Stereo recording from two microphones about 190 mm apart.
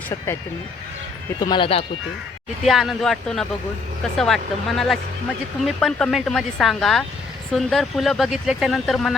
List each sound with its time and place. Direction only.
1.4 s speech: 25° left (ahead or behind)
2.6 s speech: centre (ahead or behind)